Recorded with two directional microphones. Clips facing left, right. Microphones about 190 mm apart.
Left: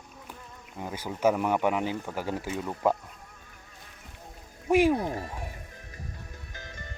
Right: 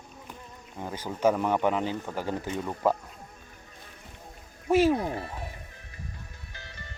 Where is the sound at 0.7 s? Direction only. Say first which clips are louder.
Even; 10° left (ahead or behind).